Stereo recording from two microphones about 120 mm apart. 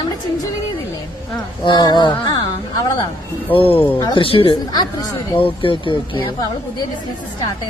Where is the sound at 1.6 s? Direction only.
40° left (ahead or behind).